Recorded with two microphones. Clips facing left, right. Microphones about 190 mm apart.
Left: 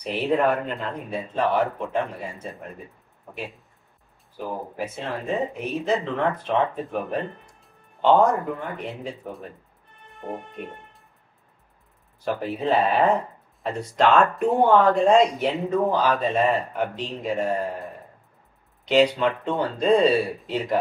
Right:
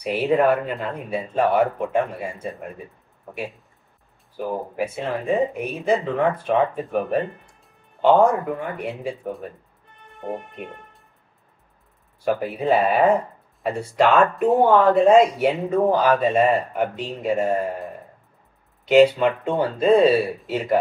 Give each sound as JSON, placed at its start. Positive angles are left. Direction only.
{"t": 0.0, "sound": "speech", "side_deg": -5}
{"t": 4.7, "sound": "speech", "side_deg": -10}
{"t": 10.1, "sound": "music", "side_deg": 0}
{"t": 12.3, "sound": "speech", "side_deg": -10}
{"t": 19.2, "sound": "speech", "side_deg": -5}